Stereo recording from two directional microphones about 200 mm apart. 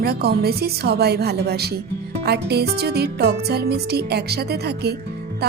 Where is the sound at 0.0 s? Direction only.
50° right (ahead or behind).